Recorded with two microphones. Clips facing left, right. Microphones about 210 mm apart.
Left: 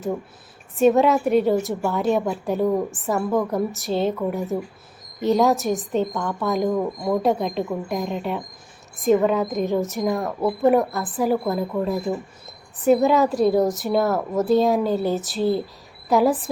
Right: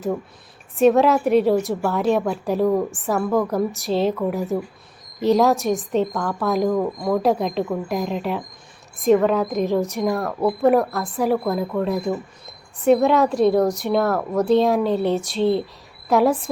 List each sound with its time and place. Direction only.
0.8 s a woman's voice: centre (ahead or behind)
10.1 s speech: 20° left (ahead or behind)
10.4 s a woman's voice: centre (ahead or behind)